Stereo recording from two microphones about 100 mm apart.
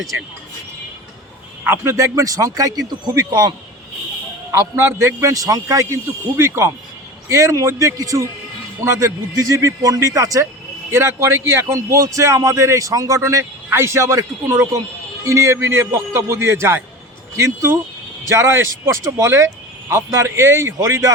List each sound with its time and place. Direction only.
1.6 s a man's voice: 25° right (ahead or behind); by 3.5 s 40° right (ahead or behind)
4.5 s a man's voice: 30° right (ahead or behind)